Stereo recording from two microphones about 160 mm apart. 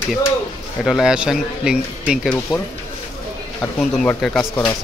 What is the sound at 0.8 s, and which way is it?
Speech, centre (ahead or behind).